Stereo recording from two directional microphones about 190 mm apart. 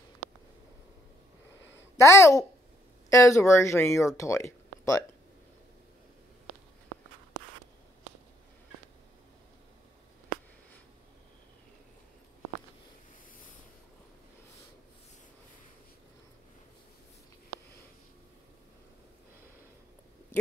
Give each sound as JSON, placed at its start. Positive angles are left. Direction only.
{"t": 2.0, "sound": "speech", "side_deg": 15}